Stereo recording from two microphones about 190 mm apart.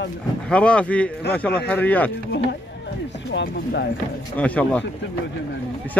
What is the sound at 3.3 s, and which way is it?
Speech, 60° left (ahead or behind).